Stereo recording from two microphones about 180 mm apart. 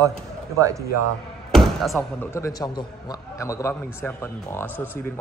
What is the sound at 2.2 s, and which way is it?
A man's voice, 15° left (ahead or behind).